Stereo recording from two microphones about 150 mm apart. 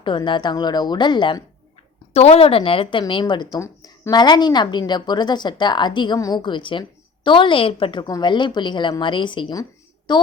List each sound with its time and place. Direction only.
0.0 s a woman's voice: 35° left (ahead or behind)
2.1 s a woman's voice: 45° left (ahead or behind)